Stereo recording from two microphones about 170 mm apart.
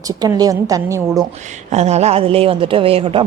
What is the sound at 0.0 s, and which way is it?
A woman's voice, 20° right (ahead or behind).